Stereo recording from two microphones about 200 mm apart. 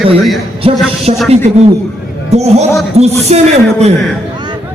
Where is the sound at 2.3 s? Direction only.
35° right (ahead or behind).